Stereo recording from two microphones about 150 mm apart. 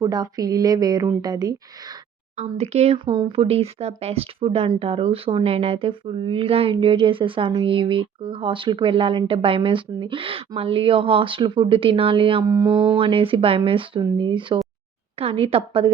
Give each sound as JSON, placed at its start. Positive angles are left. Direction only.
{"t": 0.0, "sound": "a woman's voice", "side_deg": -25}
{"t": 2.3, "sound": "speech", "side_deg": -50}
{"t": 12.5, "sound": "a woman's voice", "side_deg": -20}
{"t": 13.0, "sound": "speech", "side_deg": -35}